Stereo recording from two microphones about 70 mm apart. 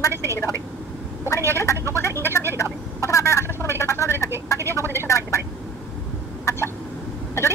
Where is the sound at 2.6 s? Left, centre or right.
Left.